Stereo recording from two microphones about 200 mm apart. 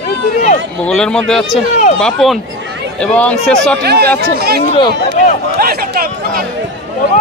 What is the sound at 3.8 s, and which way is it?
Speech, 55° right (ahead or behind).